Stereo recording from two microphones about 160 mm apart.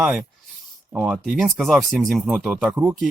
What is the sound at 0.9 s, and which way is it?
Speech, 5° right (ahead or behind).